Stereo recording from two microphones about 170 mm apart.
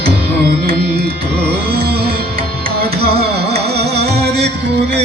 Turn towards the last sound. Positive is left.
turn(degrees=-80)